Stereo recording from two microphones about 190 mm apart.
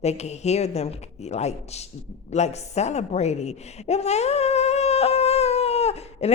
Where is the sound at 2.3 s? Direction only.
35° left (ahead or behind).